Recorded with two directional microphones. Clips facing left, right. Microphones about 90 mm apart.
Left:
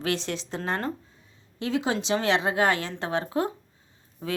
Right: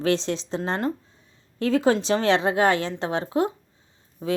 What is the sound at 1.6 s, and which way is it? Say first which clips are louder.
A woman's voice: right 6 dB; 40° right (ahead or behind).